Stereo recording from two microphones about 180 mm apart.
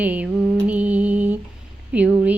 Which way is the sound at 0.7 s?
10° right (ahead or behind).